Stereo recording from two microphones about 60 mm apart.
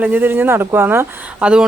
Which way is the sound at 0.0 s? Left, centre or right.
Right.